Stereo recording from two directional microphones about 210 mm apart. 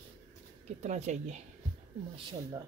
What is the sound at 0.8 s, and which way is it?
Speech, 35° right (ahead or behind).